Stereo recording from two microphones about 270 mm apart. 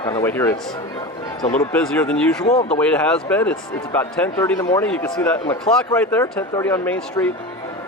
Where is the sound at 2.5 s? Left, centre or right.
Left.